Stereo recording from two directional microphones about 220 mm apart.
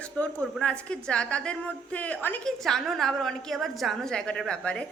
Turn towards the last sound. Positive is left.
turn(degrees=5)  # may be behind; listen again after turning